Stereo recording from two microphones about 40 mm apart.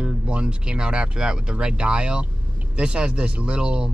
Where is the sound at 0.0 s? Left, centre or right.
Right.